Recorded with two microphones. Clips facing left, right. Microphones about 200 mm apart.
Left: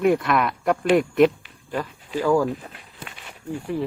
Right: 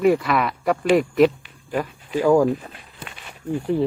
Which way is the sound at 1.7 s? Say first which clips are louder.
Right 3 dB; 15° right (ahead or behind).